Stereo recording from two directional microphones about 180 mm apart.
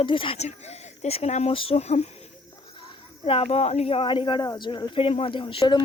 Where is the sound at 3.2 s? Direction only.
30° left (ahead or behind).